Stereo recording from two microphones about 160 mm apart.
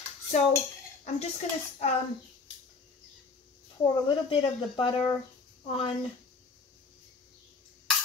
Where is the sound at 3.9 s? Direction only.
30° left (ahead or behind).